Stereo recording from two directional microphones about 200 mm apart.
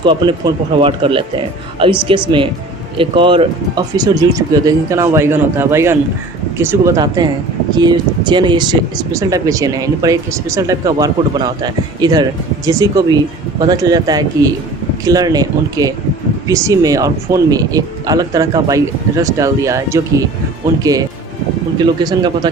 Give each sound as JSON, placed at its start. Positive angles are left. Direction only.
{"t": 0.0, "sound": "speech", "side_deg": -25}